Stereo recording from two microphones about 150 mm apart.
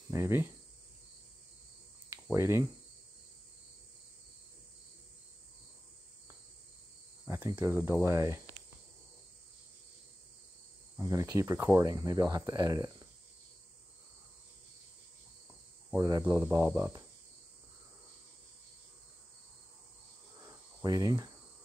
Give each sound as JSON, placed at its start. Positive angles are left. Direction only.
{"t": 0.1, "sound": "cricket", "side_deg": -15}
{"t": 2.3, "sound": "cricket", "side_deg": -15}
{"t": 7.2, "sound": "cricket", "side_deg": -15}
{"t": 11.0, "sound": "speech", "side_deg": -20}
{"t": 15.9, "sound": "speech", "side_deg": -25}
{"t": 16.3, "sound": "cricket", "side_deg": -10}
{"t": 20.8, "sound": "speech", "side_deg": -25}